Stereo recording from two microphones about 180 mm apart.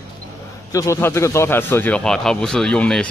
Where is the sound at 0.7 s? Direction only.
15° left (ahead or behind).